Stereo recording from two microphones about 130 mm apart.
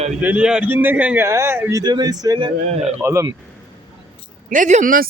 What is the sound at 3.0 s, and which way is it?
Speech, 20° right (ahead or behind).